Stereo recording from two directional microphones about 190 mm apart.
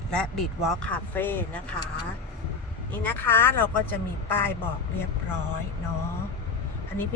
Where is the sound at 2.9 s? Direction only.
10° left (ahead or behind).